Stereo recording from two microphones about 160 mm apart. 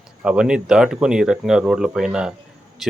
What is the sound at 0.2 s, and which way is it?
Speech, 5° right (ahead or behind).